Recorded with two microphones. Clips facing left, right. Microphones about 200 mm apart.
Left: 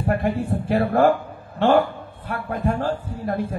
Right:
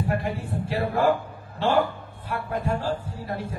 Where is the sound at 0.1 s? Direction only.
55° left (ahead or behind).